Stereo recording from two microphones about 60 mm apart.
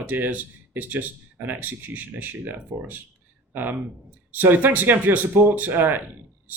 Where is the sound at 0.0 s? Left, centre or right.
Right.